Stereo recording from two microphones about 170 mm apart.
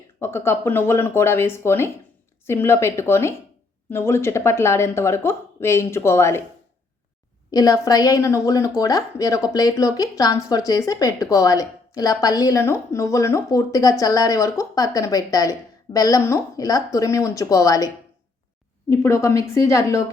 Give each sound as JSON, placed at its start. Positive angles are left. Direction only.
{"t": 0.2, "sound": "speech", "side_deg": 15}
{"t": 7.5, "sound": "speech", "side_deg": 20}